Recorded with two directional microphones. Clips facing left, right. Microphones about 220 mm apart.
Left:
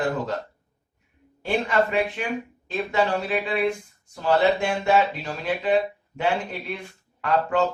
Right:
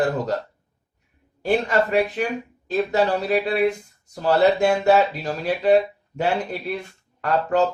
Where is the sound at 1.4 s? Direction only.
40° right (ahead or behind).